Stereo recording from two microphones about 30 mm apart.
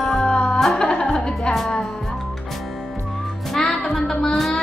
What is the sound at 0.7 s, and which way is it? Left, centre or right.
Music, left.